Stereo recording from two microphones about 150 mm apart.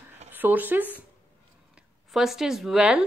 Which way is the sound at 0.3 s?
10° right (ahead or behind).